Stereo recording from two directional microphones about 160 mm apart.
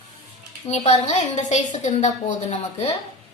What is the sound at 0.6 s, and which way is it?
A woman's voice, 45° left (ahead or behind).